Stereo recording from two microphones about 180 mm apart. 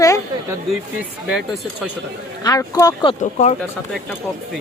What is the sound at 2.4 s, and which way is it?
Speech, 20° left (ahead or behind).